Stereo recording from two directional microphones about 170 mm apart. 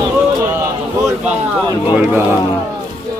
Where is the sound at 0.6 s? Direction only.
10° right (ahead or behind).